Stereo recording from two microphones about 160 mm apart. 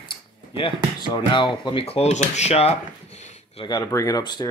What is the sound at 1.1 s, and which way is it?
Speech, 30° left (ahead or behind).